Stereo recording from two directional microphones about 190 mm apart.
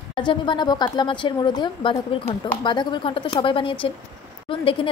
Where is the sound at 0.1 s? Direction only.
25° left (ahead or behind).